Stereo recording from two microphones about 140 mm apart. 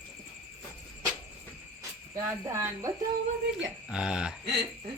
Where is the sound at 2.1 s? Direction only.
20° right (ahead or behind).